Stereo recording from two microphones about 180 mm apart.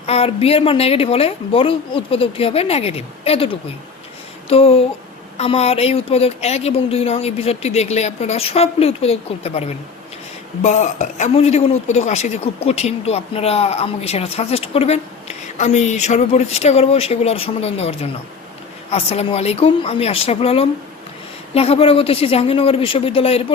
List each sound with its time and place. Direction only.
0.0 s a woman's voice: 35° left (ahead or behind)
4.4 s a sound: 35° left (ahead or behind)
5.4 s a woman's voice: 35° left (ahead or behind)